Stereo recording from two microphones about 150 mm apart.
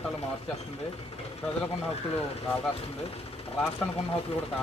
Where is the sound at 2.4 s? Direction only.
15° left (ahead or behind).